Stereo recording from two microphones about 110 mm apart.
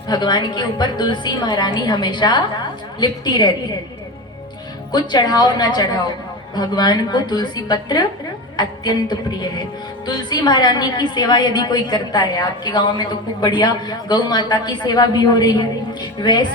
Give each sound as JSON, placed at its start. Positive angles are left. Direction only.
{"t": 0.1, "sound": "a woman's voice", "side_deg": 40}
{"t": 4.9, "sound": "a woman's voice", "side_deg": 40}